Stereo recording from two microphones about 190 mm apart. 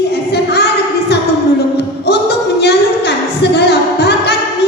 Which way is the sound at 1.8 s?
60° left (ahead or behind).